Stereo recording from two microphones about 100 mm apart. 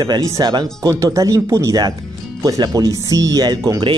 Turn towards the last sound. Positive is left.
turn(degrees=-45)  # may be behind; listen again after turning